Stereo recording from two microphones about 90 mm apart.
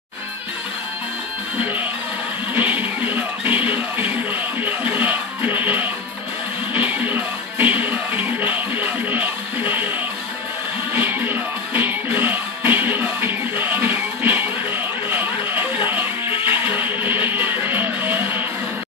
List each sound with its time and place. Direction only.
1.6 s speech: 20° right (ahead or behind)
2.5 s music: 20° right (ahead or behind)
10.9 s music: 20° right (ahead or behind)